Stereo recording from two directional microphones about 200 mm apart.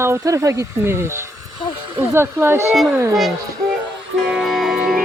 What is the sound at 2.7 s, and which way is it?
Speech, centre (ahead or behind).